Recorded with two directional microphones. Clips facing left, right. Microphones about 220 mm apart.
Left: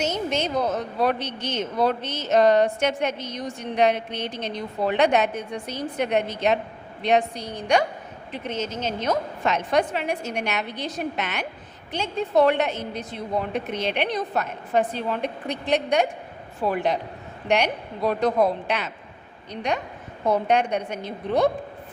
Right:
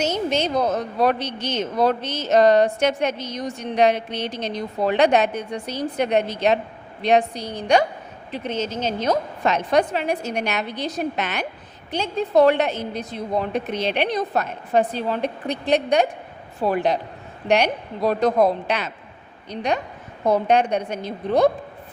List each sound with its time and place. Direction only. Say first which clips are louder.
0.0 s a woman's voice: right 3 dB; 35° right (ahead or behind)
1.2 s speech: right 3 dB; 90° right
1.7 s a woman's voice: right 3 dB; 40° right (ahead or behind)
3.1 s speech: right 3 dB; 90° right
3.3 s a woman's voice: right 3 dB; 40° right (ahead or behind)
4.1 s speech: right 3 dB; 90° right
4.5 s a woman's voice: right 3 dB; 35° right (ahead or behind)
20.2 s a woman's voice: right 3 dB; 35° right (ahead or behind)